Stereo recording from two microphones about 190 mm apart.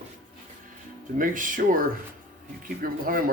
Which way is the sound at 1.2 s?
45° right (ahead or behind).